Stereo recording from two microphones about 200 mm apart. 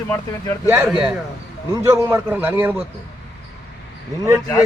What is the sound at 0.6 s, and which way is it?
A man's voice, 10° right (ahead or behind).